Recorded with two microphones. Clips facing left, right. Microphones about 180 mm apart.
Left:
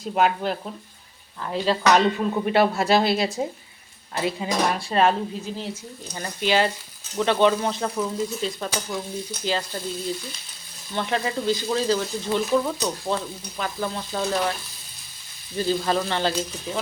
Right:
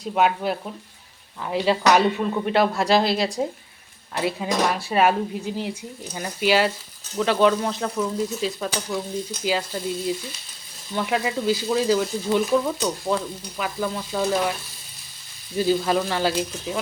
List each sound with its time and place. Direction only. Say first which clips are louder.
0.0 s stir: right 1 dB; centre (ahead or behind)
1.4 s speech: right 2 dB; 10° right (ahead or behind)
2.5 s stir: even; centre (ahead or behind); by 5.7 s 15° right (ahead or behind)
6.1 s speech: right 2 dB; 10° right (ahead or behind)
7.2 s stir: right 1 dB; centre (ahead or behind)
9.4 s speech: right 2 dB; 5° right (ahead or behind)
13.6 s stir: right 1 dB; centre (ahead or behind)
15.5 s speech: right 2 dB; 5° right (ahead or behind)